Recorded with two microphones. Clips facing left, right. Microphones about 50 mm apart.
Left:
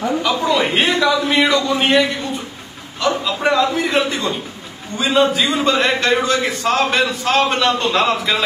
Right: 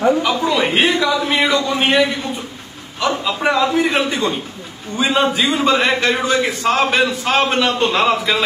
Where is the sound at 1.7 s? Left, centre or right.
Centre.